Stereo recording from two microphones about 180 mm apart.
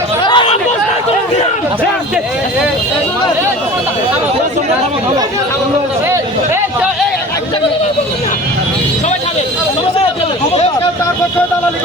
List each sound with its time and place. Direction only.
0.2 s chatter: 25° left (ahead or behind)